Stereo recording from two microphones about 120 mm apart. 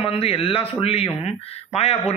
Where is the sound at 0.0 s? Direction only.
55° left (ahead or behind).